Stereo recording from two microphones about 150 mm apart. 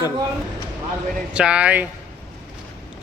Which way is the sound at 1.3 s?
5° right (ahead or behind).